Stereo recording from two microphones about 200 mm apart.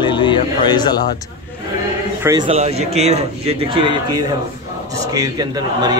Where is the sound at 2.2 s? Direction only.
15° right (ahead or behind).